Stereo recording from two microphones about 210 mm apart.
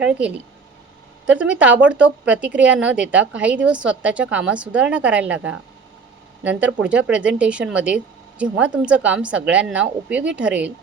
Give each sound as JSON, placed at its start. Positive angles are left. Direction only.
{"t": 0.0, "sound": "a woman's voice", "side_deg": -5}